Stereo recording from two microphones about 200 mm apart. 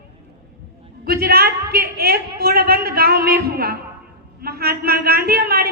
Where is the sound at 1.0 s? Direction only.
50° right (ahead or behind).